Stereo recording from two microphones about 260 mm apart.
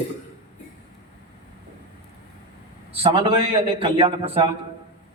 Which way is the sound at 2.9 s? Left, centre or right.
Right.